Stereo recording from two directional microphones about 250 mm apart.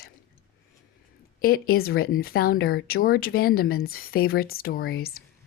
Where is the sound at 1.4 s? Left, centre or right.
Left.